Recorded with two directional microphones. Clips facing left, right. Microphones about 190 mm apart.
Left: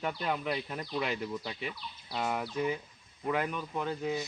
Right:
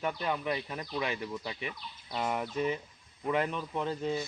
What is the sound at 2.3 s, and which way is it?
Speech, 10° left (ahead or behind).